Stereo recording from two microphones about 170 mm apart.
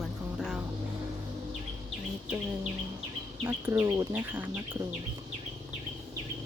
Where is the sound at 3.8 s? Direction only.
20° right (ahead or behind).